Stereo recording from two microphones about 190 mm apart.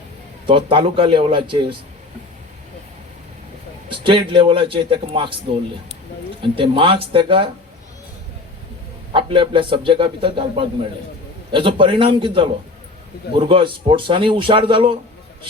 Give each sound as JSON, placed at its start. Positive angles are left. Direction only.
{"t": 0.4, "sound": "a man's voice", "side_deg": -25}
{"t": 3.8, "sound": "a man's voice", "side_deg": -25}
{"t": 6.4, "sound": "a man's voice", "side_deg": -25}
{"t": 9.1, "sound": "a man's voice", "side_deg": -25}